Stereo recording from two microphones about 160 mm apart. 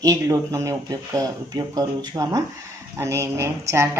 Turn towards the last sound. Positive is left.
turn(degrees=-15)  # may be behind; listen again after turning